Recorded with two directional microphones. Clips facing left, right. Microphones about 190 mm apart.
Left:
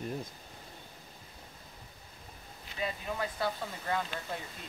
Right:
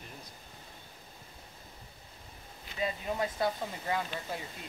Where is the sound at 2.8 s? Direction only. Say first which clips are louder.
Right 3 dB; 25° right (ahead or behind).